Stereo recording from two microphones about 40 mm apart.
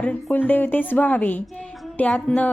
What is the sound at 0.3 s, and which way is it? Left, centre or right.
A woman's voice, left.